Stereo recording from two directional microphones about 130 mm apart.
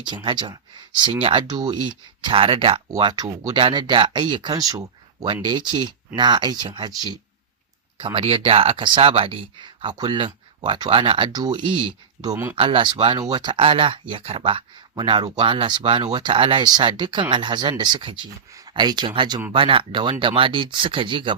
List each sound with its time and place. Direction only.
0.0 s speech: 35° right (ahead or behind)
7.9 s speech: 45° right (ahead or behind)